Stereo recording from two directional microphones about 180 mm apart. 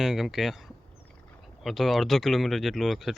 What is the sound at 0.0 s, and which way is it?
Speech, centre (ahead or behind).